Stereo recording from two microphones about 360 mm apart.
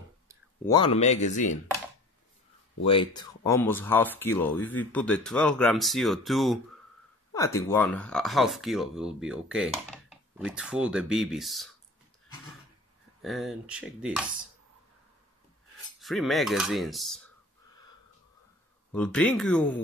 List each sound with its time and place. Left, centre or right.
0.7 s speech: centre
2.8 s speech: centre
13.2 s speech: centre
16.0 s speech: centre
18.9 s speech: centre